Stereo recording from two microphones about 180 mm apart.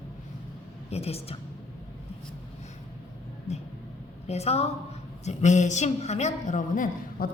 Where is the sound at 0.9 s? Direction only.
35° left (ahead or behind).